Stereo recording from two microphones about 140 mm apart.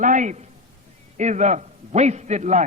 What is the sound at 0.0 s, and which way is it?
A man's voice, 65° right (ahead or behind).